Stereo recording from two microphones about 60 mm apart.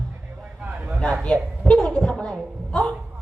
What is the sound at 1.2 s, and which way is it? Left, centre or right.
A woman's voice, centre.